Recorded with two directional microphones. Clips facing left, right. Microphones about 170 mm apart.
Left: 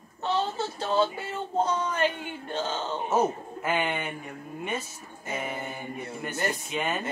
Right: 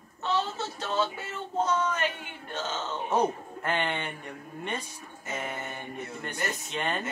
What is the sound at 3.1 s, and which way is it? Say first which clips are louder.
Speech: left 1 dB; 5° left (ahead or behind).